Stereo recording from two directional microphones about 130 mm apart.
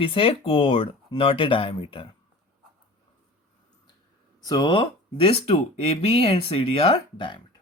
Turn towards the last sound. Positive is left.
turn(degrees=40)  # may be behind; listen again after turning